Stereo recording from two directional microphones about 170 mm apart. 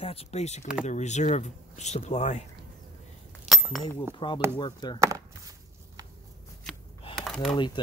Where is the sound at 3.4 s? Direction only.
Centre (ahead or behind).